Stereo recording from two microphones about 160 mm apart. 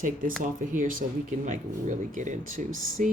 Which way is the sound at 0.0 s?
60° right (ahead or behind).